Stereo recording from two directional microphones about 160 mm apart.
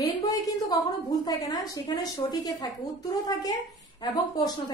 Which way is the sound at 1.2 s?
20° left (ahead or behind).